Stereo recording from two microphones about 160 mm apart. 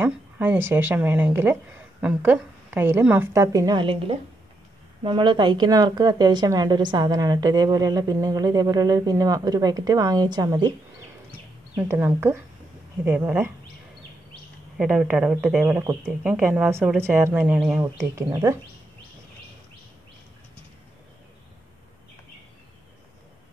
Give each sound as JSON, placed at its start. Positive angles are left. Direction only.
{"t": 0.0, "sound": "a woman's voice", "side_deg": -10}
{"t": 11.9, "sound": "a woman's voice", "side_deg": -15}
{"t": 14.8, "sound": "a woman's voice", "side_deg": -5}
{"t": 18.1, "sound": "speech", "side_deg": -20}